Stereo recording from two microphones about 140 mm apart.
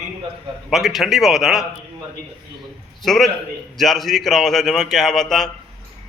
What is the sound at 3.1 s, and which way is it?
A man's voice, centre (ahead or behind).